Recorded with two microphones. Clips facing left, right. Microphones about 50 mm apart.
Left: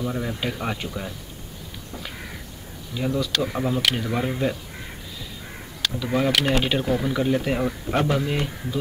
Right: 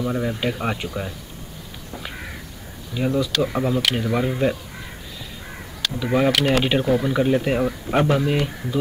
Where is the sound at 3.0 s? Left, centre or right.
Centre.